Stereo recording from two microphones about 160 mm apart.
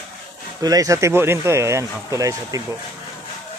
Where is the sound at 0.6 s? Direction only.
20° right (ahead or behind).